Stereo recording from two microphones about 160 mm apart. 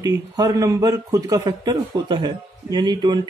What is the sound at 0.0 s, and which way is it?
A man's voice, 20° right (ahead or behind).